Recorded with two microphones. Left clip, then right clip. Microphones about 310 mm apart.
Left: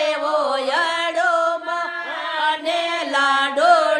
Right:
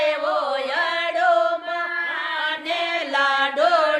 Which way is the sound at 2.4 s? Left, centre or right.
Centre.